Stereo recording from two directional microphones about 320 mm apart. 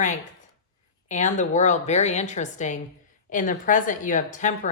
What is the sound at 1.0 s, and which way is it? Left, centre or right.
A woman's voice, left.